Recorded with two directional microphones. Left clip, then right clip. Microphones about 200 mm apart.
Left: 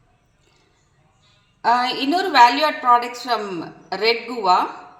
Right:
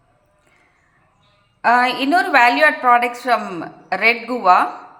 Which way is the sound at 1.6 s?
15° right (ahead or behind).